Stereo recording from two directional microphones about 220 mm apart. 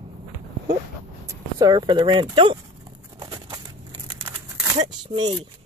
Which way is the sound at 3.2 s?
20° right (ahead or behind).